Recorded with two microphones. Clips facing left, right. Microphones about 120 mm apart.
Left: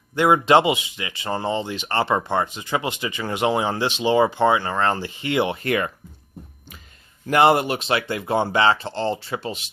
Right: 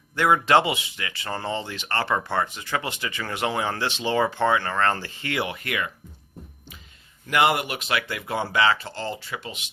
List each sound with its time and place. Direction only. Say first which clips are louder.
0.2 s speech: left 3 dB; 20° left (ahead or behind); by 5.9 s 35° left (ahead or behind)
7.3 s speech: left 5 dB; 35° left (ahead or behind)